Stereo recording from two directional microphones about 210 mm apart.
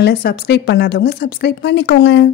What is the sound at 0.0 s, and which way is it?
A woman's voice, 50° left (ahead or behind).